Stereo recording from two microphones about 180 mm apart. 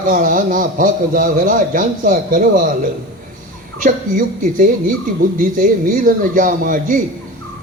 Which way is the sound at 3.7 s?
50° right (ahead or behind).